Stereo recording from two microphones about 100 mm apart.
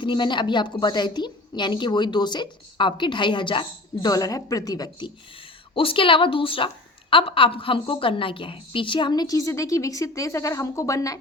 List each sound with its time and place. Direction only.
0.0 s a woman's voice: 50° left (ahead or behind)
5.7 s a woman's voice: 65° left (ahead or behind); by 11.2 s 35° left (ahead or behind)